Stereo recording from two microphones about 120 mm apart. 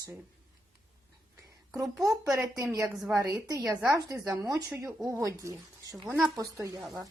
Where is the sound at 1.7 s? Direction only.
30° right (ahead or behind).